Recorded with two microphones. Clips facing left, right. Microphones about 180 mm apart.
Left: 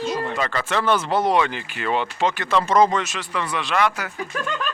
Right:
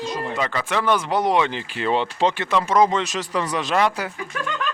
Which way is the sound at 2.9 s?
35° right (ahead or behind).